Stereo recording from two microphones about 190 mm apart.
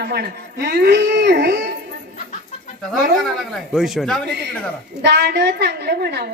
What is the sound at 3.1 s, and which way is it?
A man's voice, centre (ahead or behind).